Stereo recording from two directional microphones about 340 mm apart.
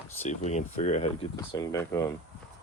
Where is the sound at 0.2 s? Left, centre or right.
Centre.